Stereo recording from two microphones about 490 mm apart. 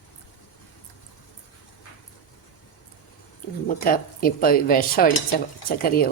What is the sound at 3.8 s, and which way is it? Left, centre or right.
Speech, centre.